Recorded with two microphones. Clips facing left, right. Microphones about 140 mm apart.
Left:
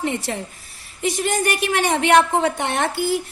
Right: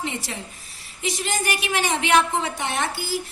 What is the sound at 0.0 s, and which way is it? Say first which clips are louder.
A woman's voice: left 6 dB; 50° left (ahead or behind).